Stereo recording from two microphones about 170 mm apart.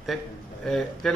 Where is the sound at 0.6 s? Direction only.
5° left (ahead or behind).